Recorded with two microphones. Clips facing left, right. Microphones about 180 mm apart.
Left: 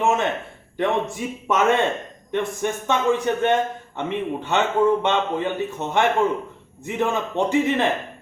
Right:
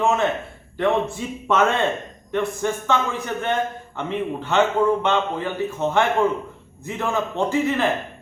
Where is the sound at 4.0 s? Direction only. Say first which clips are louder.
Even; 20° left (ahead or behind).